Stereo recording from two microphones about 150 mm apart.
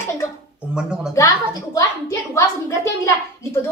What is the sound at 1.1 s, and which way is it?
A woman's voice, 20° left (ahead or behind).